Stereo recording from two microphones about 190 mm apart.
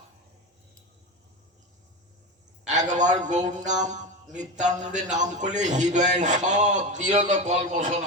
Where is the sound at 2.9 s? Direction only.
40° right (ahead or behind).